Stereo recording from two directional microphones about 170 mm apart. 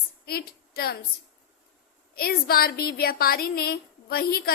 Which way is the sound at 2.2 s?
60° left (ahead or behind).